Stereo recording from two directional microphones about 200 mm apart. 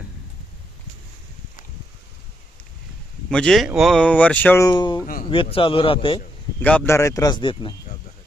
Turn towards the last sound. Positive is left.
turn(degrees=25)  # may be behind; listen again after turning